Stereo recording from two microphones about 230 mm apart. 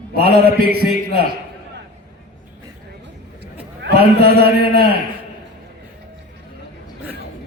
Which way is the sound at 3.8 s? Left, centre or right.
Right.